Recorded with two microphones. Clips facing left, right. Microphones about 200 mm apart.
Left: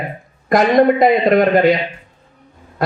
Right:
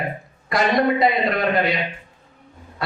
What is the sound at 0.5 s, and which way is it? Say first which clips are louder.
A man's voice: left 7 dB; 50° left (ahead or behind).